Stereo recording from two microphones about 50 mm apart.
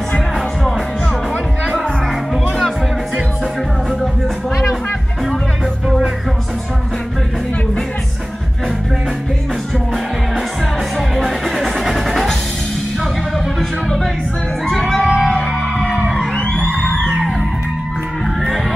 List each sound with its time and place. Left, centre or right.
11.1 s music: centre
13.6 s music: centre
14.7 s music: centre
15.2 s music: centre